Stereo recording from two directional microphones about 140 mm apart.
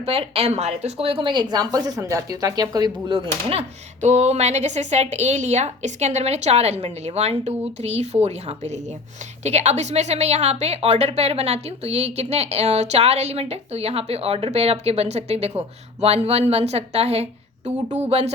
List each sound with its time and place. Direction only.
0.0 s a woman's voice: 45° right (ahead or behind); by 3.2 s 30° right (ahead or behind)
4.0 s a woman's voice: 50° right (ahead or behind)